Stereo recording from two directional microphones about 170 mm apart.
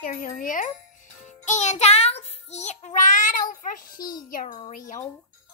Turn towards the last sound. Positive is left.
turn(degrees=45)  # may be behind; listen again after turning